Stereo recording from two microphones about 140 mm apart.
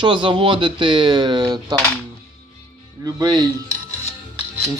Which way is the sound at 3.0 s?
30° right (ahead or behind).